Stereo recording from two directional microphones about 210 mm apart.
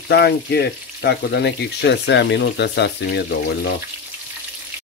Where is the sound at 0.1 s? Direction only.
50° left (ahead or behind).